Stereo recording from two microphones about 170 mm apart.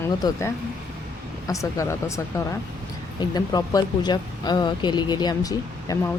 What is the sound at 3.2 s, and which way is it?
Speech, 20° left (ahead or behind).